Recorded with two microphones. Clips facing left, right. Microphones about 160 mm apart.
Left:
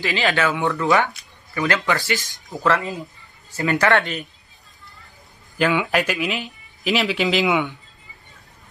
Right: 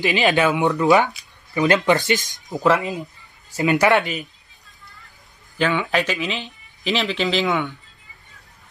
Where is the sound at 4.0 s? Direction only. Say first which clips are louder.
Right 1 dB; 5° right (ahead or behind).